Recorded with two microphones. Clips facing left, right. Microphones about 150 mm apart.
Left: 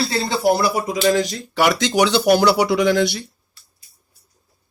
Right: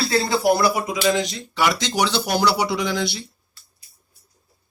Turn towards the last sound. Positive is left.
turn(degrees=50)  # may be behind; listen again after turning